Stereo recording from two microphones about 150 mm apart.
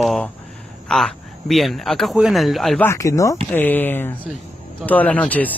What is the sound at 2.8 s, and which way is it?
Speech, 20° left (ahead or behind).